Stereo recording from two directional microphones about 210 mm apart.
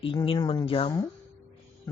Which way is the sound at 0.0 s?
25° left (ahead or behind).